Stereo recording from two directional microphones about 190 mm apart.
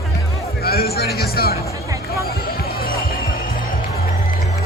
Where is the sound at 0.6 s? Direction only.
55° left (ahead or behind).